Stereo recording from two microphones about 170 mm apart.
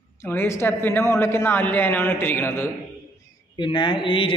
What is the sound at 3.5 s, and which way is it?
Speech, 30° left (ahead or behind).